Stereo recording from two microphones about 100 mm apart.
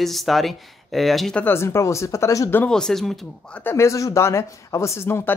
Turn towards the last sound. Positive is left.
turn(degrees=25)  # may be behind; listen again after turning